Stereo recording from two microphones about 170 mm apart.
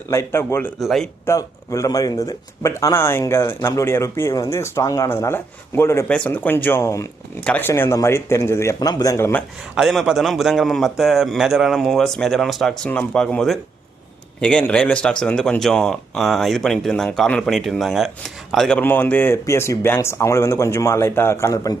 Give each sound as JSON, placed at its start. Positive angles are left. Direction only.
{"t": 0.1, "sound": "speech", "side_deg": 15}
{"t": 0.8, "sound": "a man's voice", "side_deg": 0}
{"t": 1.2, "sound": "speech", "side_deg": 20}
{"t": 9.7, "sound": "a man's voice", "side_deg": 0}